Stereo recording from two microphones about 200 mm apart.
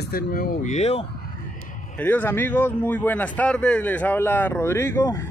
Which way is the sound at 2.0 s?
10° left (ahead or behind).